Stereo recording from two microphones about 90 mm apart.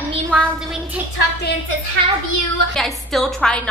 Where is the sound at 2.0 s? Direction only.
70° right (ahead or behind).